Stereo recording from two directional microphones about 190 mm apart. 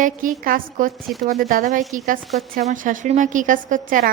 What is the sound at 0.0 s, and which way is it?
A woman's voice, 45° right (ahead or behind).